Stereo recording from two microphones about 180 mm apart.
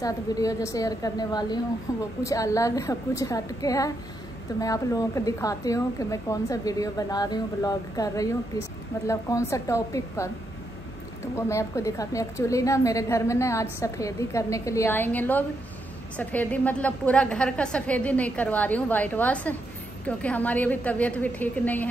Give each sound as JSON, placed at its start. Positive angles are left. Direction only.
{"t": 0.0, "sound": "a woman's voice", "side_deg": 20}
{"t": 11.3, "sound": "a woman's voice", "side_deg": 15}